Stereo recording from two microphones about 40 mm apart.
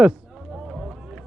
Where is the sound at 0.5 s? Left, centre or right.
Centre.